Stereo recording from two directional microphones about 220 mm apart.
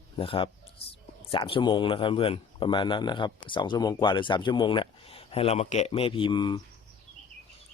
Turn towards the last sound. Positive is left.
turn(degrees=20)  # may be behind; listen again after turning